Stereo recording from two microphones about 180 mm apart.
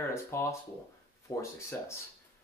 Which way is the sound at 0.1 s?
15° left (ahead or behind).